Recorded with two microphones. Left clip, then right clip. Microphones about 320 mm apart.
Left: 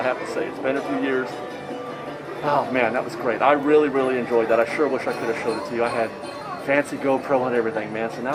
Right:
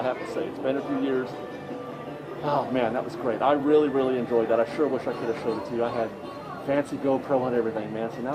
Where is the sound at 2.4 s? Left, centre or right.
Centre.